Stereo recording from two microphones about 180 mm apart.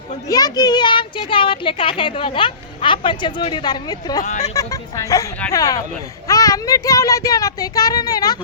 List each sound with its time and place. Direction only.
0.3 s speech: 20° left (ahead or behind)
4.3 s speech: 40° left (ahead or behind)
4.5 s speech: 20° left (ahead or behind)